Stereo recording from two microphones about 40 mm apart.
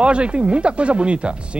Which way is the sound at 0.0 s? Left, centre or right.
Right.